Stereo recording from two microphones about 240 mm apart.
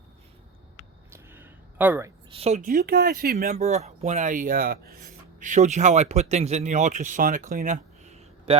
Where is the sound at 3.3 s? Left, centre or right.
Right.